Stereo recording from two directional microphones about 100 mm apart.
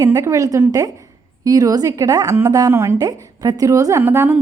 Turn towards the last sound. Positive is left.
turn(degrees=-20)  # may be behind; listen again after turning